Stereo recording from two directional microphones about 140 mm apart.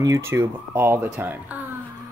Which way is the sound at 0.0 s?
20° right (ahead or behind).